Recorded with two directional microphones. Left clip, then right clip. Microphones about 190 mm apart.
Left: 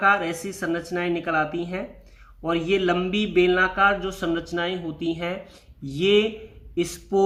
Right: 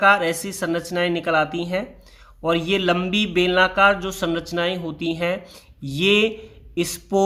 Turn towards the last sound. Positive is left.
turn(degrees=-35)  # may be behind; listen again after turning